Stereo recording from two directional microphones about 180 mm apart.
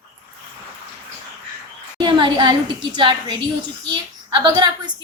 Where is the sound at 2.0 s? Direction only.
25° right (ahead or behind).